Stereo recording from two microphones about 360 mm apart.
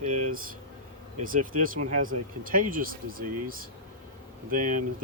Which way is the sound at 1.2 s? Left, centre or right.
Right.